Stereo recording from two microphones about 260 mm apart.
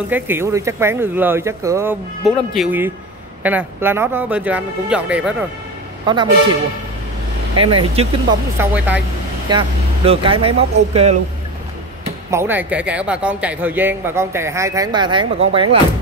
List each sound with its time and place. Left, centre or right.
0.1 s a man's voice: centre
6.1 s a man's voice: centre
7.5 s speech: centre
8.5 s speech: centre
9.5 s speech: centre
12.3 s a man's voice: centre